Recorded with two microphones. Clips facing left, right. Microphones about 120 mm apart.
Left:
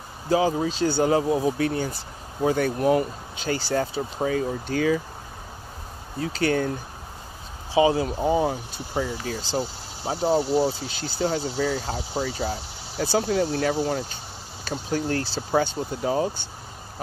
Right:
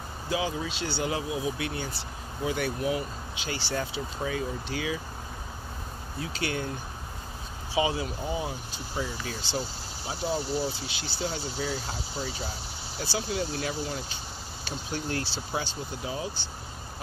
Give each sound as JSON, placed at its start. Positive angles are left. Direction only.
{"t": 0.3, "sound": "speech", "side_deg": 40}
{"t": 6.2, "sound": "speech", "side_deg": 45}
{"t": 7.9, "sound": "speech", "side_deg": 40}
{"t": 10.3, "sound": "speech", "side_deg": 25}
{"t": 10.9, "sound": "speech", "side_deg": 45}
{"t": 11.5, "sound": "speech", "side_deg": 65}
{"t": 14.6, "sound": "speech", "side_deg": 45}